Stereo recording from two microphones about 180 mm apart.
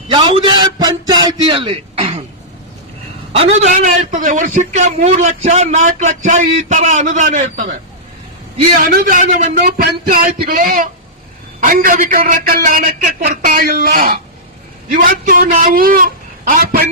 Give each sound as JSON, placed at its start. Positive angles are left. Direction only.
{"t": 0.1, "sound": "a sound", "side_deg": -30}
{"t": 3.3, "sound": "a man's voice", "side_deg": -35}
{"t": 8.8, "sound": "a man's voice", "side_deg": -50}
{"t": 9.6, "sound": "a man's voice", "side_deg": -55}